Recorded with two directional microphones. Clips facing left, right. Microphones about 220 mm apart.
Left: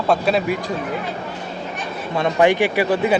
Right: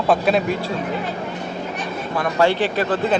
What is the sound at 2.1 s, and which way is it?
Speech, 20° left (ahead or behind).